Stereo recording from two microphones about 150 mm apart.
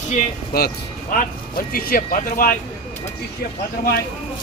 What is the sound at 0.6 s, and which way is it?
Speech, 90° left.